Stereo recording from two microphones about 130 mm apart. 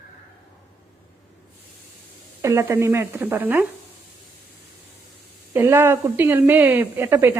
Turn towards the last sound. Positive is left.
turn(degrees=-20)  # may be behind; listen again after turning